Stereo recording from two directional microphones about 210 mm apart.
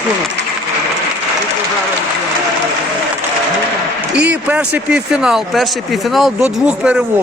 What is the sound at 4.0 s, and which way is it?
A man's voice, 5° right (ahead or behind).